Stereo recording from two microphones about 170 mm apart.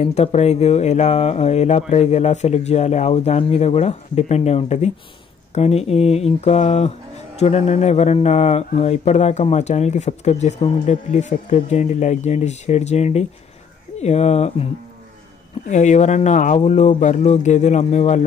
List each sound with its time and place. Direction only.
0.0 s speech: 40° left (ahead or behind)